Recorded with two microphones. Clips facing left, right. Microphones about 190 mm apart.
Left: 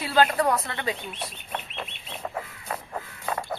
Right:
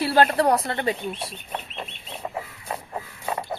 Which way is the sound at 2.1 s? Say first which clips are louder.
Right 2 dB; 10° right (ahead or behind).